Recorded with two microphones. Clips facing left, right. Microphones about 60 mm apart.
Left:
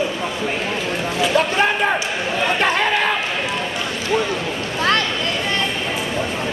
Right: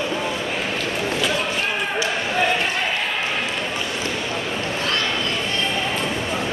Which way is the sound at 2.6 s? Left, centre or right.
Left.